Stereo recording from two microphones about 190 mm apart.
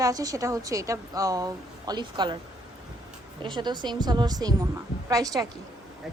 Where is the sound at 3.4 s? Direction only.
25° right (ahead or behind).